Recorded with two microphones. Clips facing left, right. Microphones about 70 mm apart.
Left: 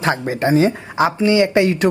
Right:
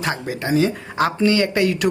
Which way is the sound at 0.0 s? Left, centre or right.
Left.